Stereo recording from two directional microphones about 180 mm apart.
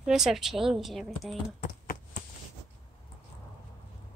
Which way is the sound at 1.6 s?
50° left (ahead or behind).